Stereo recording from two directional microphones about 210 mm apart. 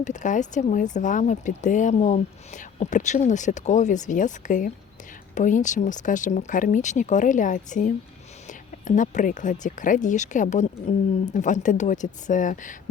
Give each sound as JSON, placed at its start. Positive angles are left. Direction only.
{"t": 0.0, "sound": "speech", "side_deg": 35}